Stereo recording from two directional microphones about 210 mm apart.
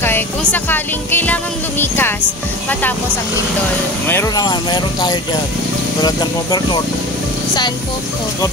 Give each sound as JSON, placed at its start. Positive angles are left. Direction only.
{"t": 0.0, "sound": "speech", "side_deg": 10}
{"t": 4.1, "sound": "speech", "side_deg": 15}